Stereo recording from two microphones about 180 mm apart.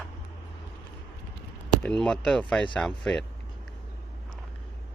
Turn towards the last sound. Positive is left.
turn(degrees=5)  # may be behind; listen again after turning